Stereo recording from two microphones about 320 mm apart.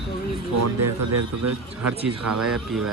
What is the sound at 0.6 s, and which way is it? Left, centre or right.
Speech, right.